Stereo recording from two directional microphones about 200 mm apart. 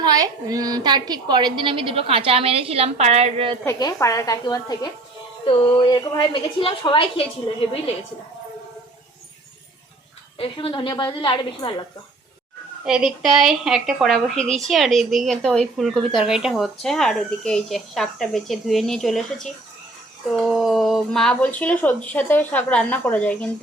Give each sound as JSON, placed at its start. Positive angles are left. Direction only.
{"t": 0.0, "sound": "a woman's voice", "side_deg": -20}
{"t": 3.7, "sound": "a woman's voice", "side_deg": 15}
{"t": 10.3, "sound": "a woman's voice", "side_deg": 25}
{"t": 12.8, "sound": "a woman's voice", "side_deg": -5}